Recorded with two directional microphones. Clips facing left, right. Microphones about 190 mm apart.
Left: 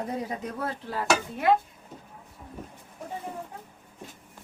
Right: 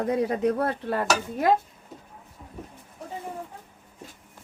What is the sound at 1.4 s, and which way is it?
Speech, 40° right (ahead or behind).